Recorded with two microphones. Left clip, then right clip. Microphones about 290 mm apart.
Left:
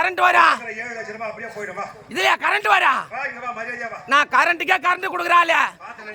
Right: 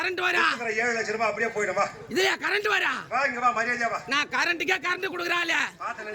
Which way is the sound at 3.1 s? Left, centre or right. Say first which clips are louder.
Right 4 dB; centre.